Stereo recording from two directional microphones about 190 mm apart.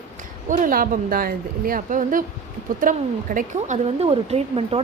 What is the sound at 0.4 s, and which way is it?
A woman's voice, 45° right (ahead or behind).